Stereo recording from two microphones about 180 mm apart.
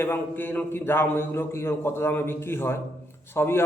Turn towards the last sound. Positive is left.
turn(degrees=15)  # may be behind; listen again after turning